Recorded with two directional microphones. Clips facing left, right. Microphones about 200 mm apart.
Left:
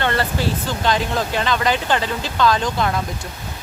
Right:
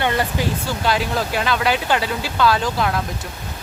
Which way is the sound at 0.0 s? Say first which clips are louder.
Even; 15° right (ahead or behind).